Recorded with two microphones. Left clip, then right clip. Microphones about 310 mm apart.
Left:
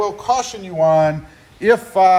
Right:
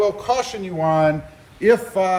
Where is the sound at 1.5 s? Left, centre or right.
Left.